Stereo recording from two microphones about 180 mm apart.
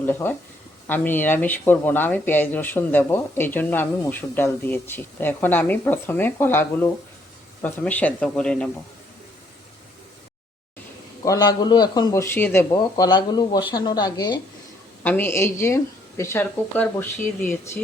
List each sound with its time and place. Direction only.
0.0 s speech: 10° left (ahead or behind)
11.3 s speech: 25° left (ahead or behind)
13.1 s speech: 25° left (ahead or behind)
15.0 s speech: 10° left (ahead or behind)